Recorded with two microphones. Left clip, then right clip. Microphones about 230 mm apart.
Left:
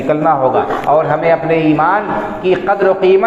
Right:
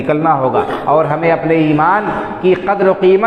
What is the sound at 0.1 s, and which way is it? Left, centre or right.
A man's voice, right.